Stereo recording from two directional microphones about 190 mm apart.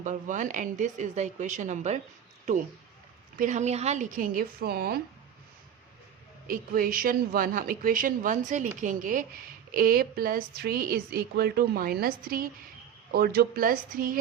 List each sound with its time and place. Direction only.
0.0 s speech: 40° right (ahead or behind)
3.3 s a woman's voice: 40° right (ahead or behind)
6.5 s a woman's voice: 50° right (ahead or behind)